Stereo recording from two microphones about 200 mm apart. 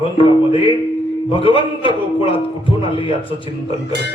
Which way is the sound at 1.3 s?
25° left (ahead or behind).